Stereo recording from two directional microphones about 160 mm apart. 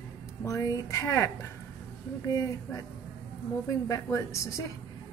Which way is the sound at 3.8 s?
20° left (ahead or behind).